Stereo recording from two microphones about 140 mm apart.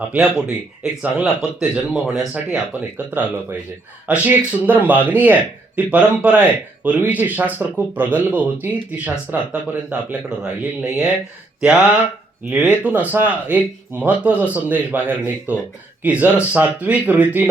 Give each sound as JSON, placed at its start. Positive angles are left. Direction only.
{"t": 0.0, "sound": "speech", "side_deg": -10}